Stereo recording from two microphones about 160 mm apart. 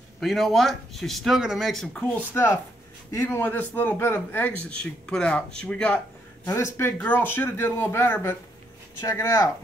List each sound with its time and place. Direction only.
0.2 s speech: centre (ahead or behind)
2.3 s a man's voice: 15° left (ahead or behind)
6.4 s a man's voice: 15° left (ahead or behind)